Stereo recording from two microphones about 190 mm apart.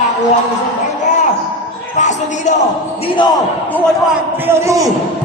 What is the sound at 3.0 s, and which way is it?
Speech, 25° left (ahead or behind).